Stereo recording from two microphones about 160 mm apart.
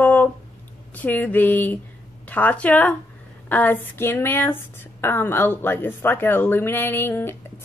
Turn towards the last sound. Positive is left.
turn(degrees=15)  # may be behind; listen again after turning